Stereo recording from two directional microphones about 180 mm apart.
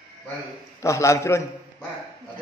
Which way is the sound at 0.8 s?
15° left (ahead or behind).